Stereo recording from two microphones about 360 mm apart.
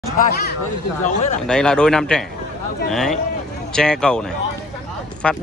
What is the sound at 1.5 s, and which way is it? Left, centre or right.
Speech, centre.